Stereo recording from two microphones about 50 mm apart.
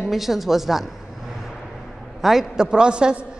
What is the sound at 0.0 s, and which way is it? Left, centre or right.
Speech, centre.